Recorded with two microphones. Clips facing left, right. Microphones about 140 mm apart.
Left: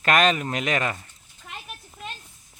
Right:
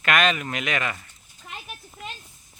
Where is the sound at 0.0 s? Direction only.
35° left (ahead or behind).